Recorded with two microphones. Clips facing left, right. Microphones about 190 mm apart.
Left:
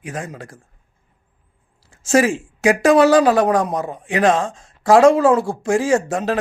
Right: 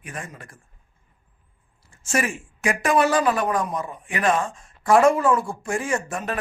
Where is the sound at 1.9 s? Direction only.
90° left.